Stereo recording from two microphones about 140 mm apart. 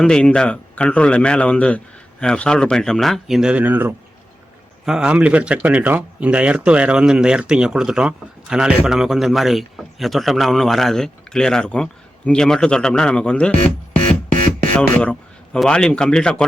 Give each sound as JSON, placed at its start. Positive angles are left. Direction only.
{"t": 0.0, "sound": "a man's voice", "side_deg": 5}
{"t": 14.4, "sound": "a sound", "side_deg": -90}
{"t": 14.8, "sound": "speech", "side_deg": 10}